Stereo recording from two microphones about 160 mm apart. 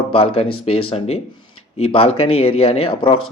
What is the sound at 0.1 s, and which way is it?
Speech, 35° left (ahead or behind).